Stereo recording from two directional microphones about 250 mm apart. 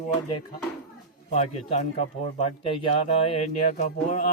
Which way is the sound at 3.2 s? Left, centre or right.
Left.